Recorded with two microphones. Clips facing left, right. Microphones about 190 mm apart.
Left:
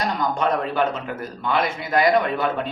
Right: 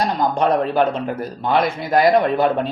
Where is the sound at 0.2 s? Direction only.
35° right (ahead or behind).